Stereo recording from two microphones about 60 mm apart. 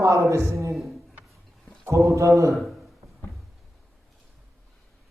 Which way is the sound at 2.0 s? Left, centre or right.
Right.